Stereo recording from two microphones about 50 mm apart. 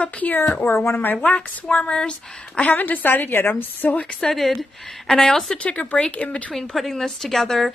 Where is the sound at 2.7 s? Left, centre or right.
Left.